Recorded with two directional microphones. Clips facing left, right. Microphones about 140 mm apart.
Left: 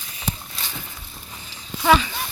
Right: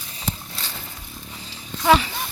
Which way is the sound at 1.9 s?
25° right (ahead or behind).